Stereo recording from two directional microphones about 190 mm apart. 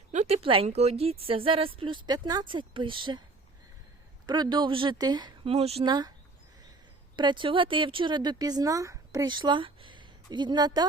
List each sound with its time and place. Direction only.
0.1 s speech: 40° right (ahead or behind)
4.3 s speech: 25° right (ahead or behind)
7.2 s speech: 25° right (ahead or behind)